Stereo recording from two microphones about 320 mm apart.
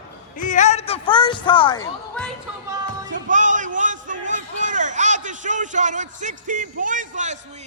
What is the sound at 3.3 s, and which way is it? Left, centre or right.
Speech, right.